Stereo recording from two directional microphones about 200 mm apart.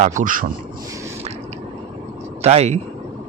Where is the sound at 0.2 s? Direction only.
40° right (ahead or behind).